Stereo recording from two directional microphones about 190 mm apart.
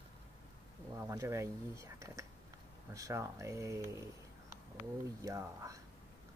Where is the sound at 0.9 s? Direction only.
15° right (ahead or behind).